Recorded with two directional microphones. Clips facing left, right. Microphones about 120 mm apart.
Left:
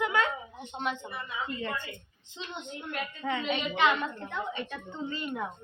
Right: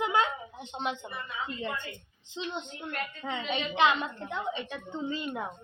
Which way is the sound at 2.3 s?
20° right (ahead or behind).